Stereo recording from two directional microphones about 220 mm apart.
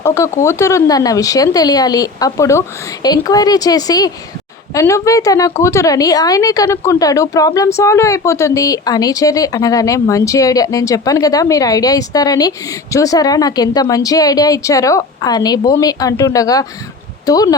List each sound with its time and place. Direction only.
0.0 s a woman's voice: 15° left (ahead or behind)